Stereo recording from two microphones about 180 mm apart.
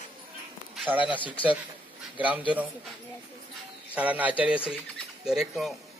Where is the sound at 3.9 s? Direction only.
10° right (ahead or behind).